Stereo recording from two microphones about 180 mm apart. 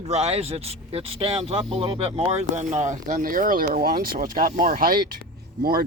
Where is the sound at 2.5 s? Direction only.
40° right (ahead or behind).